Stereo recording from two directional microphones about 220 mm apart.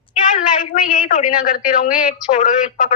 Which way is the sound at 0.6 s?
35° left (ahead or behind).